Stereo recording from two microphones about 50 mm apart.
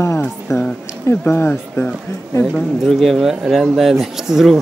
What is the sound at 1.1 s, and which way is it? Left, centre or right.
Speech, left.